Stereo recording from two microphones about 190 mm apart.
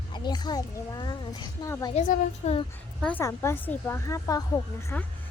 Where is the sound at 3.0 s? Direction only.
10° left (ahead or behind).